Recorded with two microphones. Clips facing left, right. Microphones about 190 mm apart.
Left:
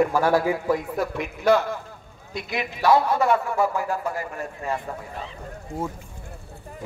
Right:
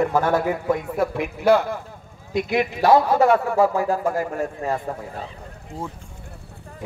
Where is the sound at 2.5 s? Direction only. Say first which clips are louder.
Right 3 dB; 35° right (ahead or behind).